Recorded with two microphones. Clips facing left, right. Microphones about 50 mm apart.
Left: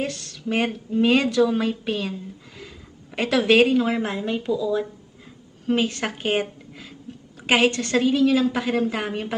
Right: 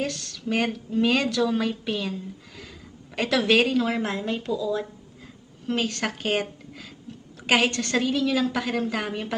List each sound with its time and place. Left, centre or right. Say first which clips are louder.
0.0 s a woman's voice: left 1 dB; left